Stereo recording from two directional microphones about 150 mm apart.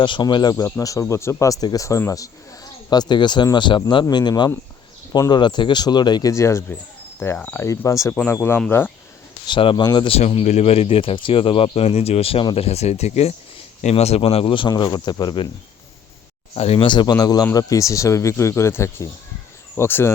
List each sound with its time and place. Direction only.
0.0 s speech: 30° left (ahead or behind); by 8.9 s 10° left (ahead or behind)
9.5 s speech: 35° left (ahead or behind)
10.1 s speech: 40° left (ahead or behind)
16.6 s speech: 40° left (ahead or behind); by 20.1 s 15° left (ahead or behind)